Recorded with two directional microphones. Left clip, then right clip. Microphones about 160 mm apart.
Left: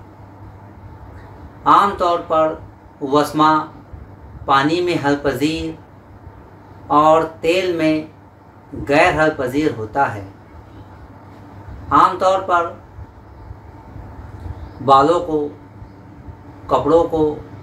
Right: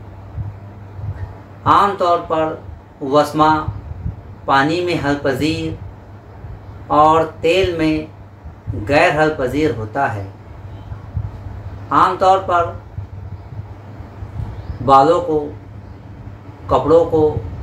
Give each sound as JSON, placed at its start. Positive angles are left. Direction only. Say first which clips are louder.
{"t": 1.6, "sound": "speech", "louder": "even", "side_deg": 20}
{"t": 6.9, "sound": "speech", "louder": "right 1 dB", "side_deg": 20}
{"t": 11.9, "sound": "speech", "louder": "right 1 dB", "side_deg": 20}
{"t": 14.9, "sound": "speech", "louder": "right 1 dB", "side_deg": 20}
{"t": 16.6, "sound": "a man's voice", "louder": "right 2 dB", "side_deg": 20}